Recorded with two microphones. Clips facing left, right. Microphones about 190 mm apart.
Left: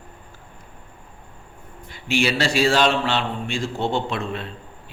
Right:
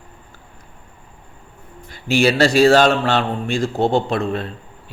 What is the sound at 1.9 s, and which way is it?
A man's voice, 40° right (ahead or behind).